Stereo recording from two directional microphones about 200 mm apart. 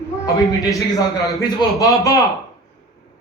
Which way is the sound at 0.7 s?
15° left (ahead or behind).